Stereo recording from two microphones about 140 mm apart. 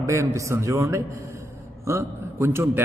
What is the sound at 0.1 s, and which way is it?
A man's voice, 20° right (ahead or behind).